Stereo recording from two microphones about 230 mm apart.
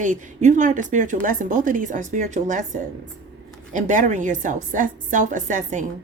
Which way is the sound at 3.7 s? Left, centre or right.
Right.